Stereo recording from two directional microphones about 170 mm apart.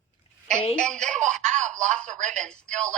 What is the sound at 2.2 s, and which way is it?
Speech, 45° right (ahead or behind).